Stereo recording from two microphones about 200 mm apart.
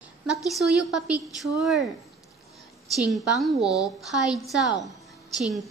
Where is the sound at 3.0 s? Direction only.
Centre (ahead or behind).